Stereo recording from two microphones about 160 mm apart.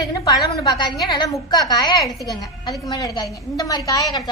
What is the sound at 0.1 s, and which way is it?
A woman's voice, 25° left (ahead or behind).